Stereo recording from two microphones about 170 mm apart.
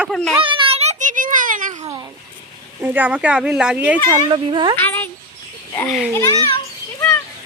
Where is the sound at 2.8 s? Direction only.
10° right (ahead or behind).